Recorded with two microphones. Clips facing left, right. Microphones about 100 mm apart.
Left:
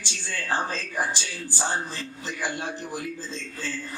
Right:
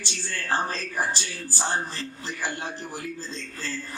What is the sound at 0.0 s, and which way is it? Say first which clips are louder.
Speech: even; 15° left (ahead or behind).